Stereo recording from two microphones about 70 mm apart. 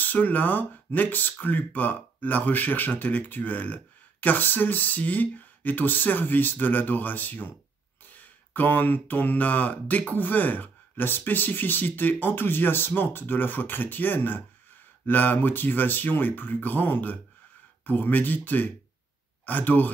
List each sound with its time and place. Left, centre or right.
0.0 s speech: left